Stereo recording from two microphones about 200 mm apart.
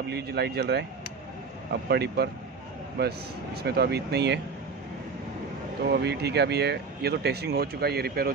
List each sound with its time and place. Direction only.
0.1 s speech: 55° right (ahead or behind)
5.9 s speech: 55° right (ahead or behind)